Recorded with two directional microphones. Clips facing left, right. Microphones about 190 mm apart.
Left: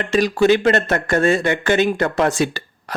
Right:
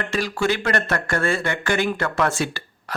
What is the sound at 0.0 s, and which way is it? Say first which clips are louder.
Speech: left 7 dB; 20° left (ahead or behind).